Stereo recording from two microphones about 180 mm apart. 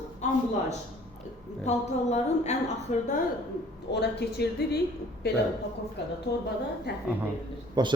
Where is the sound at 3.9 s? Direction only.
70° left (ahead or behind).